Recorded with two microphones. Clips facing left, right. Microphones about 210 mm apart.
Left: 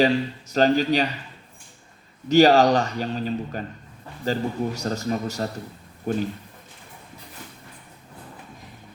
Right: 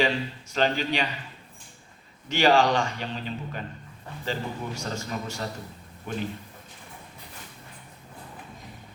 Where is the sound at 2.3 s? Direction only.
40° left (ahead or behind).